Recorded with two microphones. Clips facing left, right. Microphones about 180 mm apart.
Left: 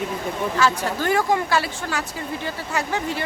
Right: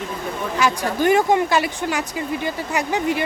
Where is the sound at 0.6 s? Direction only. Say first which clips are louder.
Right 3 dB; 15° right (ahead or behind).